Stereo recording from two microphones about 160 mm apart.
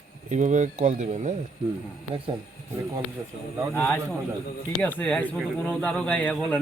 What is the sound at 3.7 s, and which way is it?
Speech, 15° left (ahead or behind).